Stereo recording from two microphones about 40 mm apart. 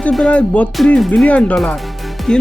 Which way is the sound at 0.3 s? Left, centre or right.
Left.